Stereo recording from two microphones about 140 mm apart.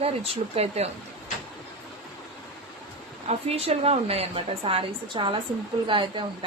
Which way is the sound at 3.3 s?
45° right (ahead or behind).